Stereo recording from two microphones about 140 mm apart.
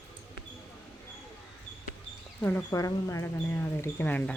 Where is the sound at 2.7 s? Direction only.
25° left (ahead or behind).